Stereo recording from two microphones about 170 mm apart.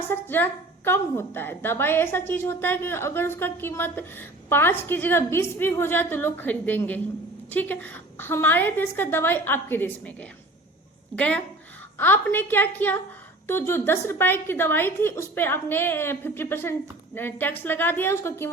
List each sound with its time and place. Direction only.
0.1 s a woman's voice: 10° left (ahead or behind)